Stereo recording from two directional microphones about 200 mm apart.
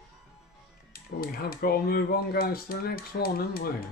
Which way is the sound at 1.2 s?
50° left (ahead or behind).